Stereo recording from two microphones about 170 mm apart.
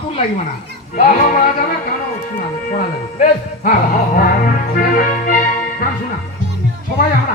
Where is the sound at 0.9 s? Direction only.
50° left (ahead or behind).